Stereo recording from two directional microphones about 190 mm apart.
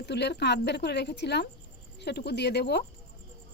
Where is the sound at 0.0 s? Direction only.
60° left (ahead or behind).